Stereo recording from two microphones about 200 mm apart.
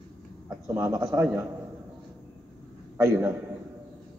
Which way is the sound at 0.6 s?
15° right (ahead or behind).